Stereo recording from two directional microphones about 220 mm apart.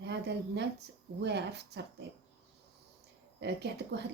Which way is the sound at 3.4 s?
50° right (ahead or behind).